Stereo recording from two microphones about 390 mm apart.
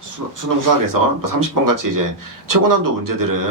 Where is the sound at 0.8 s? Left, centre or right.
Right.